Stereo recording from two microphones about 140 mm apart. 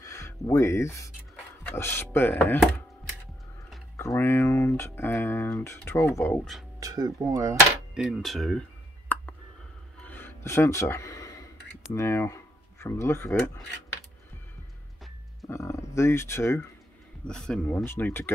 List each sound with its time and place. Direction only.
0.0 s speech: 20° left (ahead or behind)
3.9 s speech: 20° left (ahead or behind)
6.8 s speech: 25° right (ahead or behind)
7.9 s speech: 5° right (ahead or behind)
9.1 s clicking: 15° left (ahead or behind)
9.9 s music: 15° left (ahead or behind)
11.9 s speech: 20° left (ahead or behind)
15.4 s speech: 20° left (ahead or behind)
17.3 s speech: 5° left (ahead or behind)